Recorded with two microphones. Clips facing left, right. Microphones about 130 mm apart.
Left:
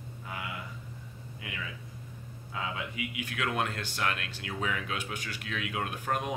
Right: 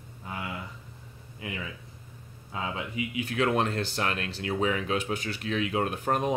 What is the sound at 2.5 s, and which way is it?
Speech, 30° right (ahead or behind).